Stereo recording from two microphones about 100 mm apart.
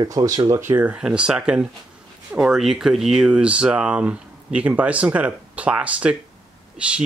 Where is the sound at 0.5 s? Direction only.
25° right (ahead or behind).